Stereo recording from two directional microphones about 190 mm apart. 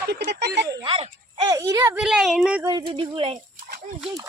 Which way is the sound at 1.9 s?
5° right (ahead or behind).